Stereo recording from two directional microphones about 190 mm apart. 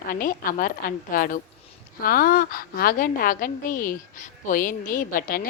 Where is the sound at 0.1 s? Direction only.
45° left (ahead or behind).